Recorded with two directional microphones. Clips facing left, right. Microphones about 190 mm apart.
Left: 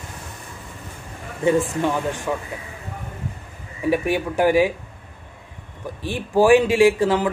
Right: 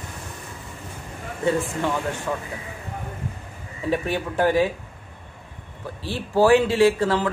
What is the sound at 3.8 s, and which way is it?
Speech, 15° left (ahead or behind).